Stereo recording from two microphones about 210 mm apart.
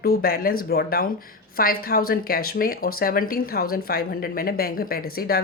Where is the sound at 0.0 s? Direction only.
45° left (ahead or behind).